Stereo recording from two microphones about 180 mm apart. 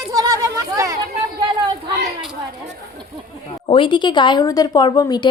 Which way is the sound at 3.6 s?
30° left (ahead or behind).